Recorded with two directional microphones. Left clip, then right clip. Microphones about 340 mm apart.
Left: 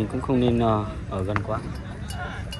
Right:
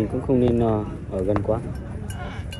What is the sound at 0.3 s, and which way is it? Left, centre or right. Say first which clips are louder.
Speech: right 2 dB; left.